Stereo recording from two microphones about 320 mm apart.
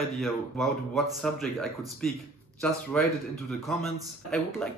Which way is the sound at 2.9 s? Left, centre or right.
Centre.